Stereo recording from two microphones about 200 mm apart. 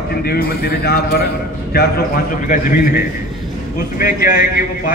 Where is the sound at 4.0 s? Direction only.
50° left (ahead or behind).